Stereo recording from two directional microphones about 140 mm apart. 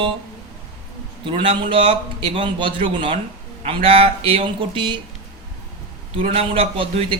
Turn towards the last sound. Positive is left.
turn(degrees=-40)  # may be behind; listen again after turning